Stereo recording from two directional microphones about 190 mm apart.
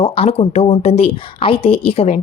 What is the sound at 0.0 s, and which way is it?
A woman's voice, 30° left (ahead or behind).